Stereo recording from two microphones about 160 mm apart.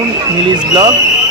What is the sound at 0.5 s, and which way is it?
Speech, 25° right (ahead or behind).